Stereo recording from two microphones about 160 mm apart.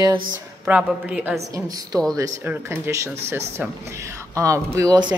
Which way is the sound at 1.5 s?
25° right (ahead or behind).